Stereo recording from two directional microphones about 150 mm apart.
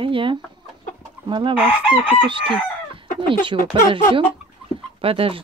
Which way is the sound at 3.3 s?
35° right (ahead or behind).